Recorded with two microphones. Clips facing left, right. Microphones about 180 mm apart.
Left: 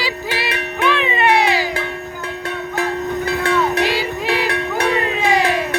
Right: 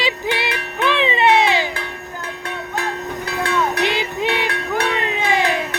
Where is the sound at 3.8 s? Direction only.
20° right (ahead or behind).